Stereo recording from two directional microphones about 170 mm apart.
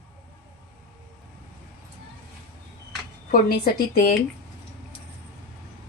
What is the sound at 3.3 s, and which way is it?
Speech, 60° left (ahead or behind).